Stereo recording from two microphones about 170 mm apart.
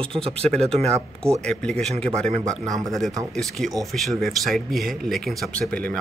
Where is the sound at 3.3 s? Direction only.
Centre (ahead or behind).